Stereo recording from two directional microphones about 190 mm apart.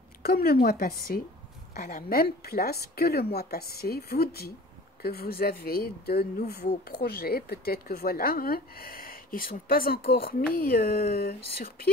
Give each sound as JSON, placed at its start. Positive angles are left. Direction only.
{"t": 0.2, "sound": "speech", "side_deg": 55}